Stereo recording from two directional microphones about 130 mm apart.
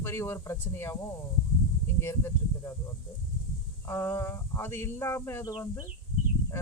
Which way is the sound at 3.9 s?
20° left (ahead or behind).